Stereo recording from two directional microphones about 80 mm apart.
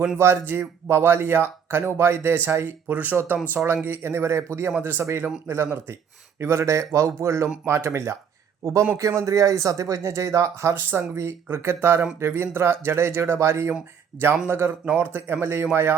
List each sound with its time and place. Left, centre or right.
0.2 s a man's voice: right
4.7 s a man's voice: right